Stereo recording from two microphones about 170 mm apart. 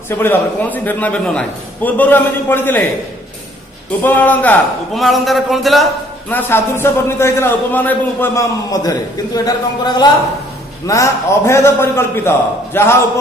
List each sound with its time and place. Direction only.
0.1 s a man's voice: 10° left (ahead or behind)
4.0 s a man's voice: 10° left (ahead or behind)
6.3 s a man's voice: 15° left (ahead or behind)